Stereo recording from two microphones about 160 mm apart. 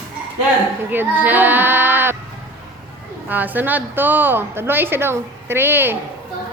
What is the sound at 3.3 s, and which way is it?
A woman's voice, 10° right (ahead or behind).